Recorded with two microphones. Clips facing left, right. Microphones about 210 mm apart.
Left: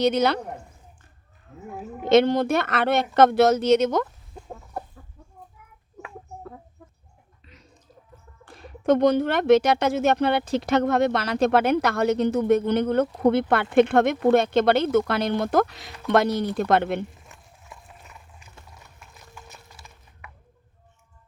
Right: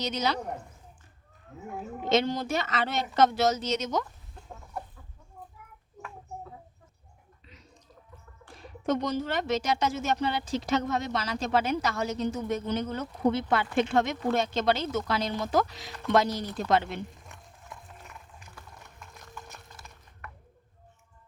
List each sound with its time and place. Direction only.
0.0 s speech: 60° left (ahead or behind)
2.0 s speech: 60° left (ahead or behind)
8.4 s speech: 60° left (ahead or behind)
17.2 s a sound: centre (ahead or behind)
18.7 s clip-clop: 5° left (ahead or behind)